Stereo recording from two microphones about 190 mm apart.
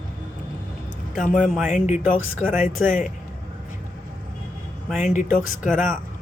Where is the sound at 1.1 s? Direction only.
40° left (ahead or behind).